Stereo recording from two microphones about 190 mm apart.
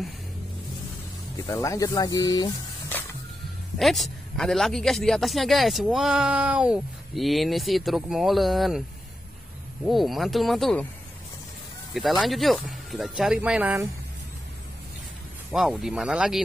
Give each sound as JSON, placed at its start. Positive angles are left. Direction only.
{"t": 1.4, "sound": "speech", "side_deg": 15}
{"t": 3.7, "sound": "a man's voice", "side_deg": 0}
{"t": 9.8, "sound": "a man's voice", "side_deg": 0}
{"t": 11.9, "sound": "a man's voice", "side_deg": 0}
{"t": 15.5, "sound": "a man's voice", "side_deg": 0}